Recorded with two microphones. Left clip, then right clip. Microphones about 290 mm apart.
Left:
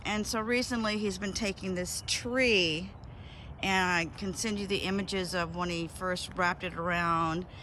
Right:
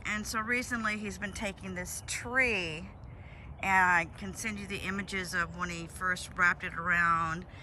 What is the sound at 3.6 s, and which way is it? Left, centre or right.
Speech, centre.